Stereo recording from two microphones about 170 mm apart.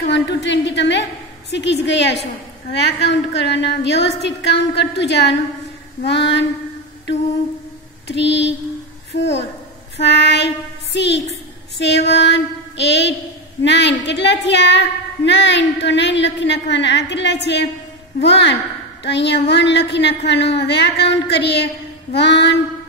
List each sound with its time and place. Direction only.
0.1 s a woman's voice: 90° left
8.1 s a woman's voice: 90° left
9.9 s child singing: 90° left
11.8 s a woman's voice: 90° left